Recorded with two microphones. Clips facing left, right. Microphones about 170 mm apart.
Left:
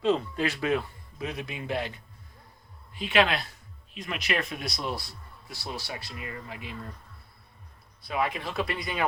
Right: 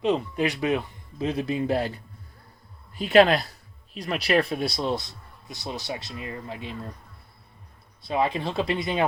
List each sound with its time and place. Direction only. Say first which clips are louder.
0.0 s speech: right 2 dB; 15° right (ahead or behind)
1.3 s speech: right 9 dB; 35° right (ahead or behind)
2.9 s speech: right 7 dB; 40° right (ahead or behind)
8.0 s speech: right 5 dB; 25° right (ahead or behind)